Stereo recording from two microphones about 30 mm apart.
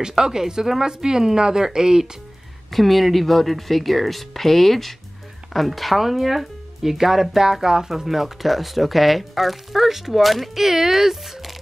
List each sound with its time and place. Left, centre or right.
0.0 s a woman's voice: right
2.7 s speech: centre; by 7.9 s right
8.1 s speech: centre